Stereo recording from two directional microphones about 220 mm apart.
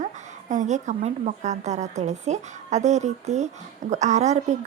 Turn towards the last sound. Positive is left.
turn(degrees=-30)  # may be behind; listen again after turning